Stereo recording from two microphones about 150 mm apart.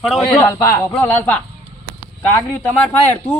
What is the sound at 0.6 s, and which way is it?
Speech, 20° left (ahead or behind).